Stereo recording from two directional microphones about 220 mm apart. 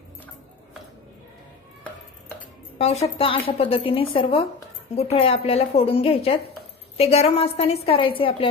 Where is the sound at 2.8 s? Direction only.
30° left (ahead or behind).